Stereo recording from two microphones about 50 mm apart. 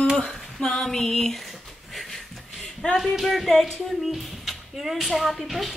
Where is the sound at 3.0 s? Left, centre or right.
Centre.